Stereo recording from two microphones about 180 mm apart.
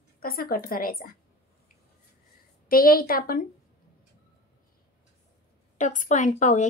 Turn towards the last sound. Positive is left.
turn(degrees=40)  # may be behind; listen again after turning